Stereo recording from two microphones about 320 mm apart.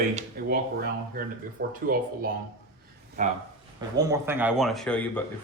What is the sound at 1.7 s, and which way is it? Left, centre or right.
Speech, right.